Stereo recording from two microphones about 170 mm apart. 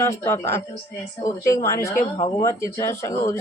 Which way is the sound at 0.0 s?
15° left (ahead or behind).